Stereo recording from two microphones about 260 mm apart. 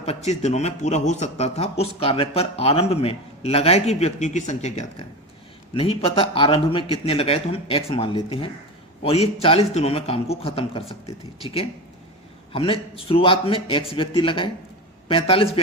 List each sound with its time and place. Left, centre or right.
0.0 s a man's voice: left
12.5 s a man's voice: left